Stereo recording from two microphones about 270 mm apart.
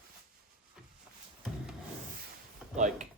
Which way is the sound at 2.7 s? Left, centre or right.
Right.